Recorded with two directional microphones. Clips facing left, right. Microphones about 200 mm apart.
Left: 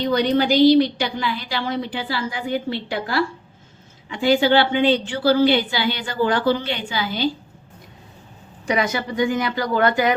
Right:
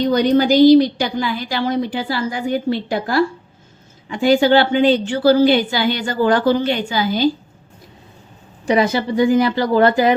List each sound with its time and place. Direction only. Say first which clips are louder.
0.0 s a woman's voice: right 4 dB; 45° right (ahead or behind)
8.6 s speech: right 6 dB; 30° right (ahead or behind)